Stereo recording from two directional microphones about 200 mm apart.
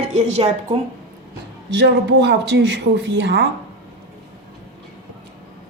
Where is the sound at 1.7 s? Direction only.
60° right (ahead or behind).